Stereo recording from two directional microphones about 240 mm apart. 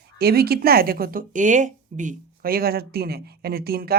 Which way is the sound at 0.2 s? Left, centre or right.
Right.